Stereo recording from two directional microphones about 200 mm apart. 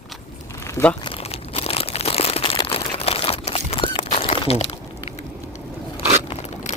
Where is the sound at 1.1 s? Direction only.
30° left (ahead or behind).